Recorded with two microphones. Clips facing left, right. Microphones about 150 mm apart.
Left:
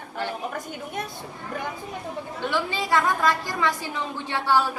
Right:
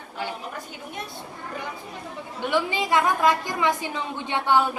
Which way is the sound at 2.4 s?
15° right (ahead or behind).